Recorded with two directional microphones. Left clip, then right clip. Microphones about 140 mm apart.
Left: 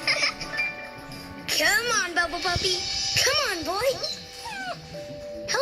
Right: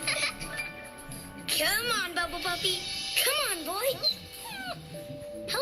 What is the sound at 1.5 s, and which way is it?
Music, 40° left (ahead or behind).